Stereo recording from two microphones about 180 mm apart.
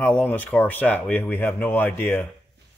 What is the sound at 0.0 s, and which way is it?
Speech, 10° left (ahead or behind).